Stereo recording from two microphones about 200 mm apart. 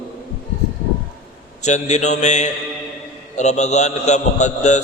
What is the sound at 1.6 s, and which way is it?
A man's voice, 35° left (ahead or behind).